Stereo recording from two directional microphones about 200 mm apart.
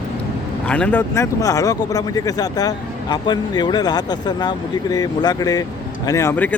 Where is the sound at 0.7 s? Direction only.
5° left (ahead or behind).